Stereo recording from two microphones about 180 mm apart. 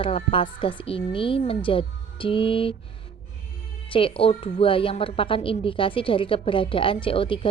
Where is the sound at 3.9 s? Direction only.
30° left (ahead or behind).